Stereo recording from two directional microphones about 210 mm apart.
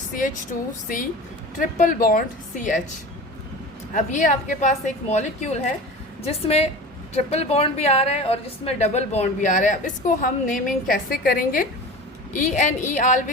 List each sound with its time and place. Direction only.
0.5 s a woman's voice: 40° left (ahead or behind)
3.9 s a woman's voice: 35° left (ahead or behind)